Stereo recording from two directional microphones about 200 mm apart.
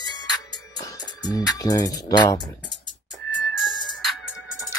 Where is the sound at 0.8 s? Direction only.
20° left (ahead or behind).